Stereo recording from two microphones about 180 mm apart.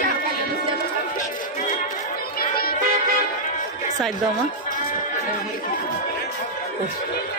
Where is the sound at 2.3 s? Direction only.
55° left (ahead or behind).